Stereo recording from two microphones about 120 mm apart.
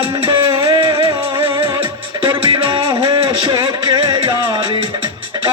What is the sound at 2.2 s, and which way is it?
Music, 40° right (ahead or behind).